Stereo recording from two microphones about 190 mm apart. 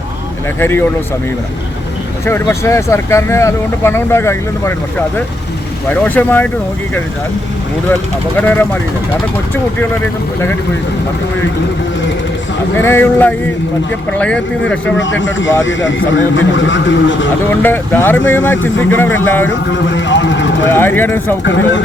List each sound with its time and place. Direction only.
0.6 s speech: 10° left (ahead or behind)
2.2 s speech: 15° left (ahead or behind)
8.4 s speech: 10° left (ahead or behind)
12.7 s speech: 10° left (ahead or behind)
14.9 s a man's voice: 75° left (ahead or behind)
17.6 s speech: 10° left (ahead or behind)
19.5 s a man's voice: 75° left (ahead or behind)
20.7 s speech: 10° left (ahead or behind)
21.4 s speech: 80° left